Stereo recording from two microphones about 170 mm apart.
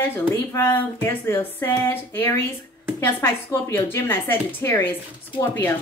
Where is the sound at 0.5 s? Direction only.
15° left (ahead or behind).